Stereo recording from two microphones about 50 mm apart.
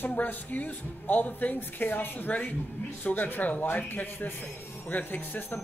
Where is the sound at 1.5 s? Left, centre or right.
Left.